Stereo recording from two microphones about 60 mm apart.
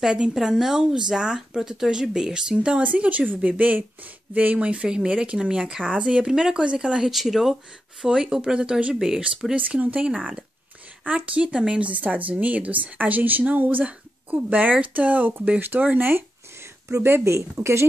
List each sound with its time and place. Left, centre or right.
0.0 s speech: centre
7.1 s speech: centre
9.6 s speech: right
17.0 s speech: right